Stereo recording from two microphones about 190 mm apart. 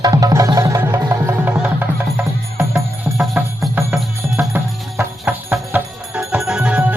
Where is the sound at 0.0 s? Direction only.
20° right (ahead or behind).